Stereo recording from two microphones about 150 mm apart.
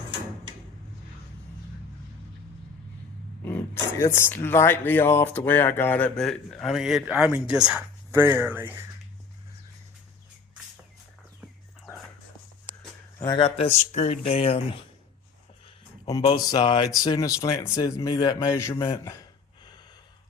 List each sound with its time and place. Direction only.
3.4 s speech: 15° left (ahead or behind); by 7.9 s 5° right (ahead or behind)
8.1 s speech: 15° right (ahead or behind)
13.1 s a sound: 25° left (ahead or behind)
13.4 s speech: 40° left (ahead or behind)
16.2 s speech: 30° left (ahead or behind)
18.7 s speech: 35° left (ahead or behind)
19.0 s a sound: 25° left (ahead or behind)